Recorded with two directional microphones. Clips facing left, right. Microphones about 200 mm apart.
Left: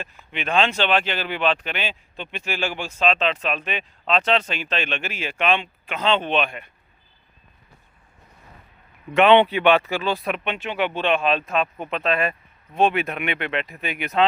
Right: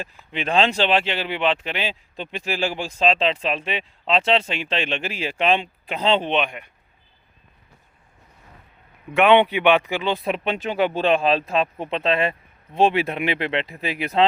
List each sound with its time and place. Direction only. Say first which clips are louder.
0.3 s speech: right 1 dB; 30° right (ahead or behind)
6.3 s speech: even; 15° right (ahead or behind)
9.1 s speech: left 1 dB; 10° right (ahead or behind); by 14.3 s 30° right (ahead or behind)